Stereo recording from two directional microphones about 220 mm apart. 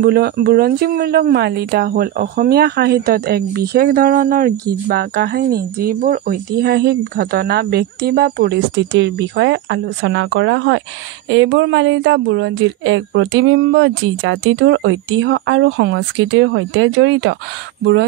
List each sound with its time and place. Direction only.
0.0 s speech: 45° right (ahead or behind); by 17.4 s 60° right (ahead or behind)